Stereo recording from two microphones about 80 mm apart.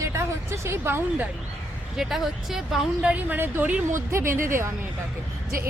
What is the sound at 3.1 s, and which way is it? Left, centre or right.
A woman's voice, right.